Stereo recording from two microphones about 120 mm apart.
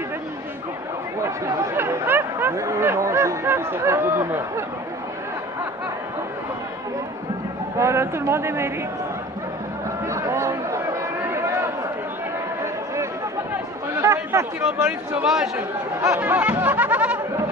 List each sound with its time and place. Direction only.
1.2 s speech: 25° right (ahead or behind)
7.7 s speech: 25° right (ahead or behind)
10.0 s a sound: 25° right (ahead or behind)
13.9 s speech: 20° right (ahead or behind)
15.2 s speech: 5° right (ahead or behind)
16.2 s music: 15° right (ahead or behind)